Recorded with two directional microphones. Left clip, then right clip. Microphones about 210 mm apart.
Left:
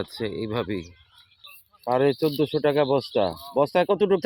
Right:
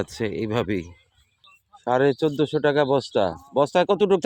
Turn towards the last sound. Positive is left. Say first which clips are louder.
# right 2 dB
turn(degrees=-10)  # may be behind; listen again after turning